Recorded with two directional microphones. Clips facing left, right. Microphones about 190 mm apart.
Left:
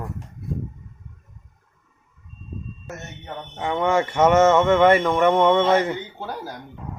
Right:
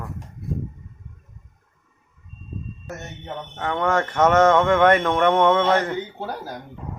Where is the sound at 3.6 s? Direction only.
10° left (ahead or behind).